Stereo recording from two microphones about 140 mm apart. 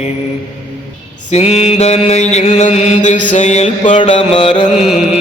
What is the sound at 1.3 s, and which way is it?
Mantra, 50° left (ahead or behind).